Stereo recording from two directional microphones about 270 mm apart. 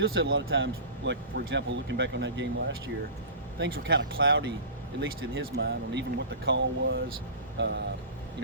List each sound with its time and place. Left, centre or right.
0.0 s speech: right